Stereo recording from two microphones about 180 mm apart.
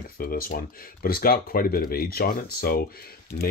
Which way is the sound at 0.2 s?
55° left (ahead or behind).